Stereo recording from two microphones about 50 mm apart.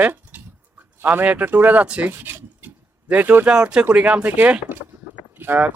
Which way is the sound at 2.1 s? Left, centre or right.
Right.